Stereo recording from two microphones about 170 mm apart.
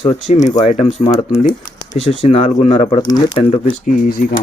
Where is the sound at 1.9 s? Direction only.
40° left (ahead or behind).